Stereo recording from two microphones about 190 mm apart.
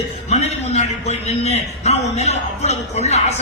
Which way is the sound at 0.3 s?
35° left (ahead or behind).